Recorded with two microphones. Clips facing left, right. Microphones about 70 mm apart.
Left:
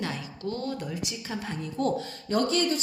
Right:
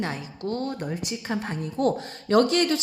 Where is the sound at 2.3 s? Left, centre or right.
Right.